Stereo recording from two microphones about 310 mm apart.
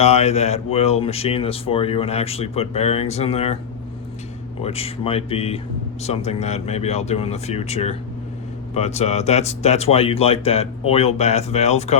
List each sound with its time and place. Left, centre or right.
0.0 s speech: left
4.6 s speech: centre